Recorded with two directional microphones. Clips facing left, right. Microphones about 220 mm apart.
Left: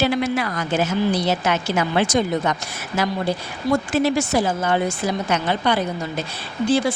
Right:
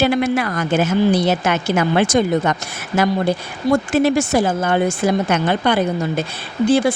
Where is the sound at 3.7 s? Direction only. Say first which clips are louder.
Right 4 dB; 50° right (ahead or behind).